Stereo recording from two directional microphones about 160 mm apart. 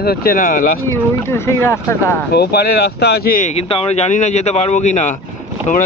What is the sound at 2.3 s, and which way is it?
Speech, 80° left.